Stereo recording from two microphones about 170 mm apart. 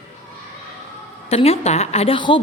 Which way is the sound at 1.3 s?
35° left (ahead or behind).